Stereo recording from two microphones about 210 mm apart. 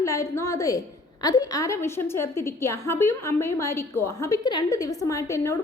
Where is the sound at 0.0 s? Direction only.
15° left (ahead or behind).